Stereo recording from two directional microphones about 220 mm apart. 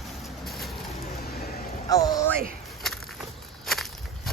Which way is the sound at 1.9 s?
15° left (ahead or behind).